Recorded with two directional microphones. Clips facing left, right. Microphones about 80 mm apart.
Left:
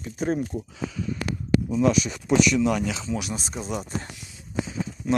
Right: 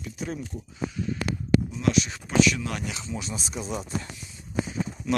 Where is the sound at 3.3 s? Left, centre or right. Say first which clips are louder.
Left 2 dB; left.